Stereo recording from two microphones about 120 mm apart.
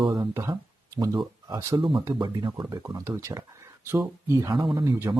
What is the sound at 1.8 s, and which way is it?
Speech, 45° right (ahead or behind).